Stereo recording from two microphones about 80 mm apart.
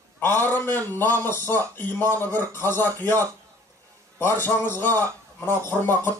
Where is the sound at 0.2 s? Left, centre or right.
Left.